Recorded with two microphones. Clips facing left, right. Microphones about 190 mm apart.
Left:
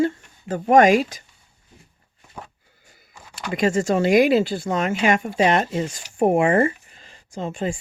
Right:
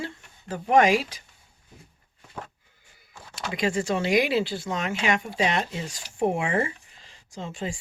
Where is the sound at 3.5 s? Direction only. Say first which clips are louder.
Left 6 dB; 45° left (ahead or behind).